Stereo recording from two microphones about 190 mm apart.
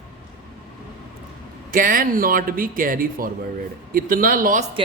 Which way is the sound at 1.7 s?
45° right (ahead or behind).